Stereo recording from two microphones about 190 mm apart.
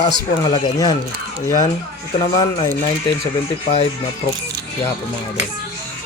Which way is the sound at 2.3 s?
35° left (ahead or behind).